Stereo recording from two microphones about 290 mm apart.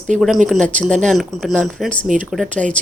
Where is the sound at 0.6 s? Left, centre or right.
Right.